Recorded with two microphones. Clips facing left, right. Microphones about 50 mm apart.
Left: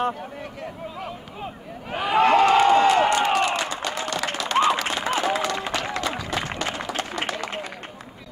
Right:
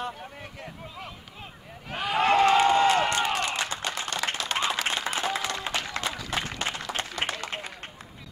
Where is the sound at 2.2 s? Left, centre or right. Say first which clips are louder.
Left 4 dB; left.